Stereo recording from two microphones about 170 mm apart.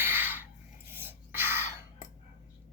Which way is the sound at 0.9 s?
15° right (ahead or behind).